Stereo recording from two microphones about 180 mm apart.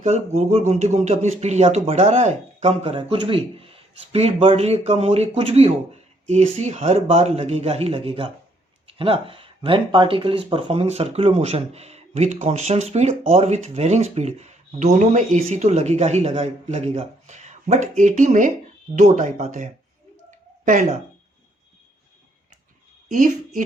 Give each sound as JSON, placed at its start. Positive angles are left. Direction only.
{"t": 0.0, "sound": "speech", "side_deg": -35}